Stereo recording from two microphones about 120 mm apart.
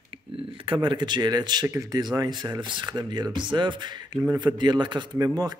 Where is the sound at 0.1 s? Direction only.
50° right (ahead or behind).